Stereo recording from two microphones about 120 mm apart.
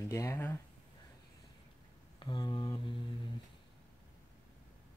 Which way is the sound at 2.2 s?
40° left (ahead or behind).